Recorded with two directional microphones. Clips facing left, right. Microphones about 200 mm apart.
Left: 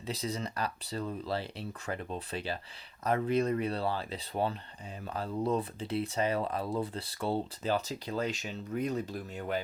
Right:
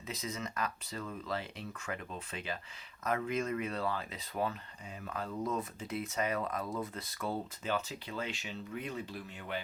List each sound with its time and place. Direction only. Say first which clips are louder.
0.1 s speech: left 5 dB; 35° left (ahead or behind)